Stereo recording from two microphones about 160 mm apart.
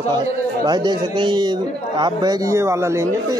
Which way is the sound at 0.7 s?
25° right (ahead or behind).